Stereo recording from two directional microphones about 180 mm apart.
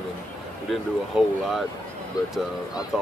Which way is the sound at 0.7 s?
Centre (ahead or behind).